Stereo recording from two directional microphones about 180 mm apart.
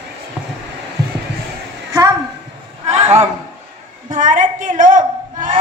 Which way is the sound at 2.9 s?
35° right (ahead or behind).